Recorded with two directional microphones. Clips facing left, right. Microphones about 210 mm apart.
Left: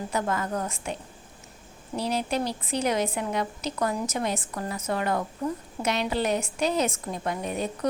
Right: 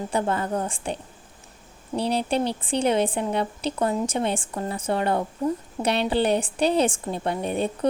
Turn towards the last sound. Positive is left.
turn(degrees=-30)  # may be behind; listen again after turning